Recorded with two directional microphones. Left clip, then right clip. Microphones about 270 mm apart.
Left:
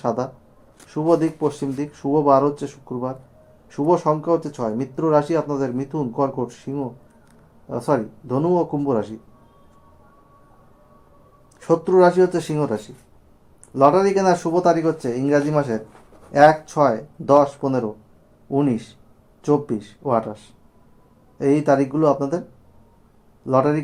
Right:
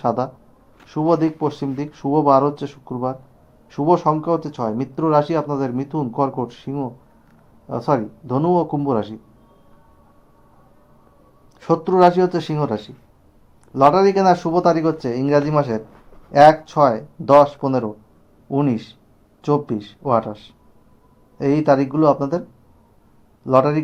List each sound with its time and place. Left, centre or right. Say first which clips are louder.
0.0 s speech: right 3 dB; centre
11.6 s speech: right 1 dB; centre
23.5 s speech: right 3 dB; centre